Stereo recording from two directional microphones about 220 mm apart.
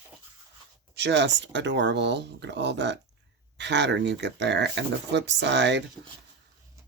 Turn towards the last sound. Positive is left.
turn(degrees=-55)  # may be behind; listen again after turning